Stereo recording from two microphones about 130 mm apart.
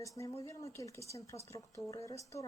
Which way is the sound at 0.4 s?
25° left (ahead or behind).